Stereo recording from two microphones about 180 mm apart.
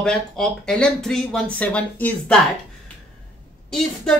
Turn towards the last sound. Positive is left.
turn(degrees=5)  # may be behind; listen again after turning